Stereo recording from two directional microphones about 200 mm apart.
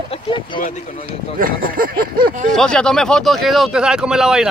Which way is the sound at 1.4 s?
45° right (ahead or behind).